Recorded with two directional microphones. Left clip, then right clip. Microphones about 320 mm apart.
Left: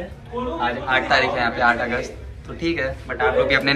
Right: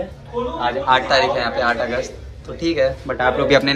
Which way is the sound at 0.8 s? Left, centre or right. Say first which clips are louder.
Right 3 dB; centre.